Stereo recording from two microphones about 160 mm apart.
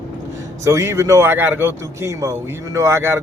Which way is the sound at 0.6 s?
15° right (ahead or behind).